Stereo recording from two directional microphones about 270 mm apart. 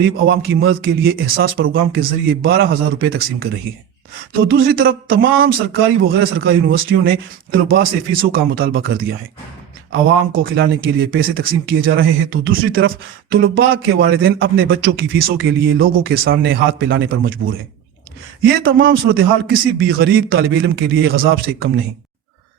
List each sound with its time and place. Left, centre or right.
0.0 s a man's voice: right
1.6 s speech: right
2.0 s a man's voice: right
17.3 s speech: right
18.6 s a man's voice: right